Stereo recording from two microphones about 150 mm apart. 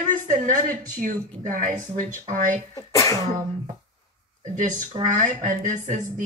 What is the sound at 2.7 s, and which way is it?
Sneeze, 25° left (ahead or behind).